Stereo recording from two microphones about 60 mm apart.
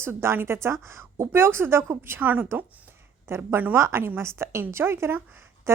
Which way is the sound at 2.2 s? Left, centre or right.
Right.